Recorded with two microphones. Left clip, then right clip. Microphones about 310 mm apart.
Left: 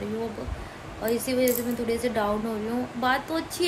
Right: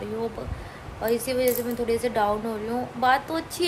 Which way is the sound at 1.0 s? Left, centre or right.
Centre.